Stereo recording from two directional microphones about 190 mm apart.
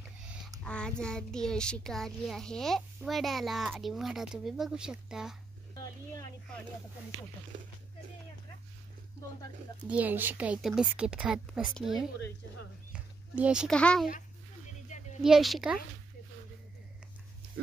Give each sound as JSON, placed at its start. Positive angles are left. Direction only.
{"t": 0.7, "sound": "a child's voice", "side_deg": 5}
{"t": 9.8, "sound": "a child's voice", "side_deg": -10}
{"t": 12.9, "sound": "a sound", "side_deg": -5}
{"t": 13.7, "sound": "a child's voice", "side_deg": 5}
{"t": 14.9, "sound": "a sound", "side_deg": 40}
{"t": 15.2, "sound": "a child's voice", "side_deg": 0}